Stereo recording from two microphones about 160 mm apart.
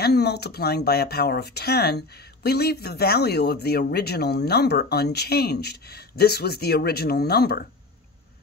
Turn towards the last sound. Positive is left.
turn(degrees=80)